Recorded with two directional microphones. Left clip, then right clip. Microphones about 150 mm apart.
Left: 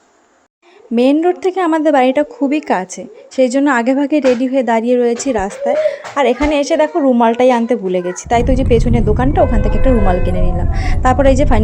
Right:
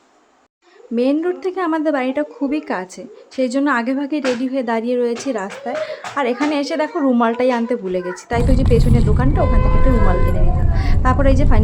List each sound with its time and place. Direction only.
0.9 s a woman's voice: 30° left (ahead or behind); by 7.3 s 10° left (ahead or behind)
7.3 s a woman's voice: 20° left (ahead or behind)